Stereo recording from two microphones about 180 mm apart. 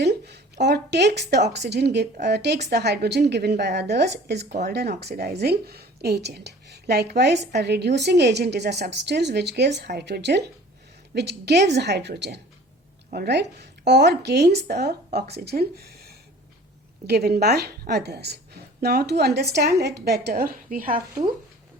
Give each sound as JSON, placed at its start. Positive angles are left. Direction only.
{"t": 0.0, "sound": "a woman's voice", "side_deg": -70}
{"t": 17.1, "sound": "a woman's voice", "side_deg": -60}